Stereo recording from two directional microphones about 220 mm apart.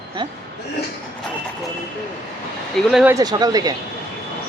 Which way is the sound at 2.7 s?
Centre (ahead or behind).